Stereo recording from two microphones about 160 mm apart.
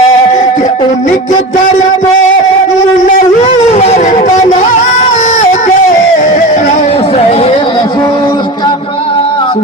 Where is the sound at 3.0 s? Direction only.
45° left (ahead or behind).